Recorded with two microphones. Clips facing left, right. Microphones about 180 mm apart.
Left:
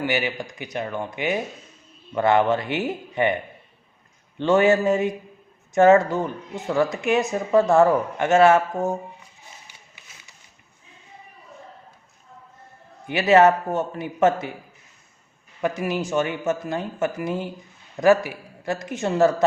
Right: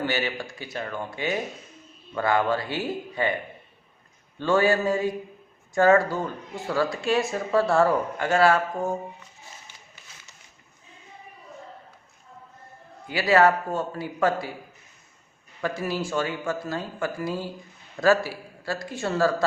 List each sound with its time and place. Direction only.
0.0 s a woman's voice: 15° left (ahead or behind)
4.4 s a woman's voice: 20° left (ahead or behind)
13.1 s a woman's voice: 20° left (ahead or behind)
15.6 s a woman's voice: 20° left (ahead or behind)